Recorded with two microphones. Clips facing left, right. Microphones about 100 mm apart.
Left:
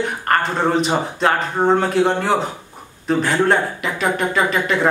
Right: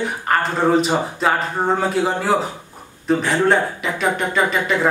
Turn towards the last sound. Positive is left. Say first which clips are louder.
# left 1 dB
turn(degrees=0)  # may be behind; listen again after turning